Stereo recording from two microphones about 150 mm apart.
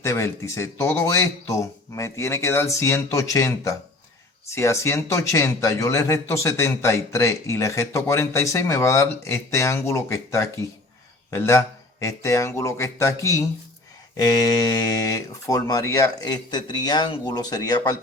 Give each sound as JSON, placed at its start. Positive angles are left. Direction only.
{"t": 0.0, "sound": "a man's voice", "side_deg": 20}